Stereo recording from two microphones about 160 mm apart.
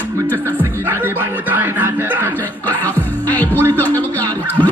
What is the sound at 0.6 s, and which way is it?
Music, 15° right (ahead or behind).